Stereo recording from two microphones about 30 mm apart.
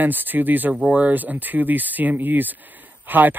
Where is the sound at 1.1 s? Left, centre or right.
Right.